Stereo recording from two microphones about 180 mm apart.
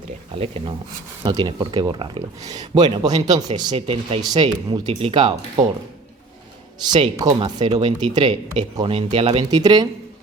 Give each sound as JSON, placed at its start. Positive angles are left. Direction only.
{"t": 0.3, "sound": "speech", "side_deg": -35}
{"t": 1.2, "sound": "speech", "side_deg": -20}
{"t": 6.8, "sound": "speech", "side_deg": -25}